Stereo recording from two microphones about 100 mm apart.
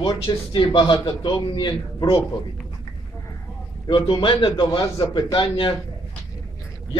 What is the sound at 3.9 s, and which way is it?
A man's voice, 55° left (ahead or behind).